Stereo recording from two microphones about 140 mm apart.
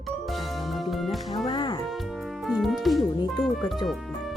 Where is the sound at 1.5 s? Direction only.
35° left (ahead or behind).